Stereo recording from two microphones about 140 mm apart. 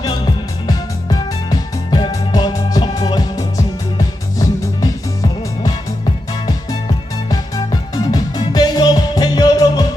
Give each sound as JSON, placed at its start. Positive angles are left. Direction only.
{"t": 0.7, "sound": "music", "side_deg": 25}
{"t": 7.3, "sound": "music", "side_deg": 30}